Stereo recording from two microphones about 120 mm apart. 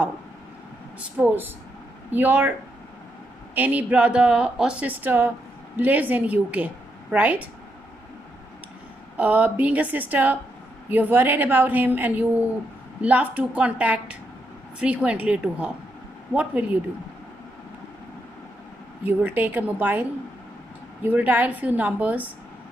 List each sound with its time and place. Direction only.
0.9 s a woman's voice: 15° right (ahead or behind)
3.5 s a woman's voice: 15° right (ahead or behind)
9.1 s a woman's voice: 10° right (ahead or behind)
19.0 s a woman's voice: 15° right (ahead or behind)